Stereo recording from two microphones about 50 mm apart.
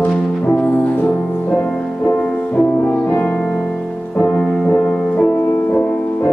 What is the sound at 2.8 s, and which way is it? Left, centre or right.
French horn, left.